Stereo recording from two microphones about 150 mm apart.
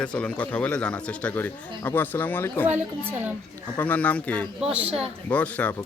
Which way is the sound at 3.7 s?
10° left (ahead or behind).